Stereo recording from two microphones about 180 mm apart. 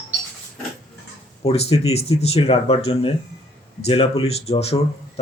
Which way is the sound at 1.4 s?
35° left (ahead or behind).